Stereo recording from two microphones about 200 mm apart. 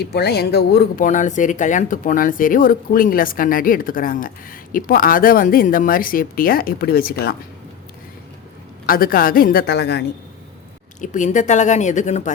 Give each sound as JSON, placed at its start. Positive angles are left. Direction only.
{"t": 0.0, "sound": "speech", "side_deg": 55}
{"t": 8.9, "sound": "speech", "side_deg": 45}
{"t": 11.0, "sound": "speech", "side_deg": 40}